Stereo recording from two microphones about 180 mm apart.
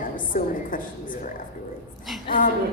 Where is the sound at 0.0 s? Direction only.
50° left (ahead or behind).